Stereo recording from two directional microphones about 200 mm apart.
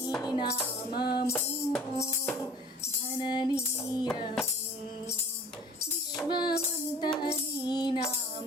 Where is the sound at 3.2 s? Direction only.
20° left (ahead or behind).